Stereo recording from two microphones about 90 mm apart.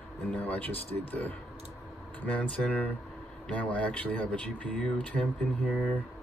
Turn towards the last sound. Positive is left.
turn(degrees=15)  # may be behind; listen again after turning